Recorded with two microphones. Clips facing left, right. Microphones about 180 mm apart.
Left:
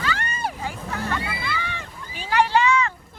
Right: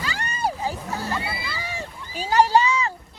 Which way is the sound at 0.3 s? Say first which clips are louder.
Right 3 dB; 35° right (ahead or behind).